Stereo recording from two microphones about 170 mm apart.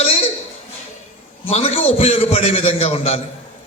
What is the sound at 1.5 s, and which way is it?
A man's voice, 35° left (ahead or behind).